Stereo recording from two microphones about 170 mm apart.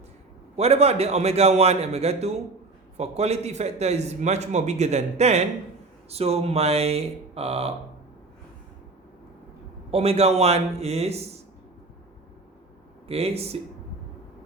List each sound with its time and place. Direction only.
0.5 s a man's voice: 40° right (ahead or behind)
9.9 s a man's voice: 35° right (ahead or behind)
13.1 s a man's voice: 35° right (ahead or behind)